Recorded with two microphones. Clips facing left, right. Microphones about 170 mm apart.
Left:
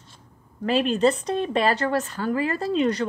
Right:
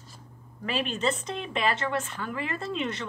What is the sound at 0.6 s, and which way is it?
A woman's voice, 35° left (ahead or behind).